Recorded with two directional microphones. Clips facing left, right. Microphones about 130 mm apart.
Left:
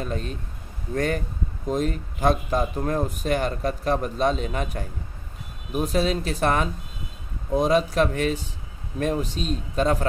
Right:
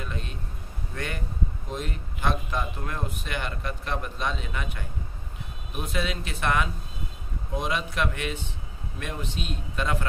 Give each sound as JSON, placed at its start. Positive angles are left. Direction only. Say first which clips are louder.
{"t": 0.0, "sound": "speech", "louder": "left 7 dB", "side_deg": 40}